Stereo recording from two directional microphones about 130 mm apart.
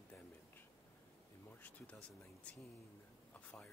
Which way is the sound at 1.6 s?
10° left (ahead or behind).